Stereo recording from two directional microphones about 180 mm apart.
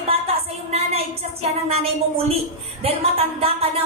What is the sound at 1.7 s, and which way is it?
A woman's voice, 35° right (ahead or behind).